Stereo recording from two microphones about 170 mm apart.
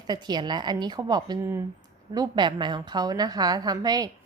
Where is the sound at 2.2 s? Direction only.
25° right (ahead or behind).